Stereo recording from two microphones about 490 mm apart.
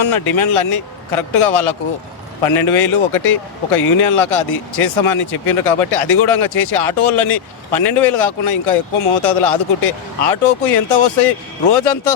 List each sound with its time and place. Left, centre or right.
0.0 s speech: left